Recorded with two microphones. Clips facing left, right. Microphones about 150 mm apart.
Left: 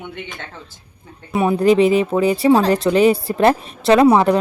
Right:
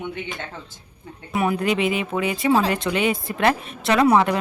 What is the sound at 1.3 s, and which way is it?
Speech, 30° left (ahead or behind).